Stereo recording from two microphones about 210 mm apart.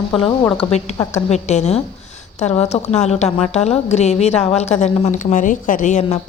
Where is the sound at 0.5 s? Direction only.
30° left (ahead or behind).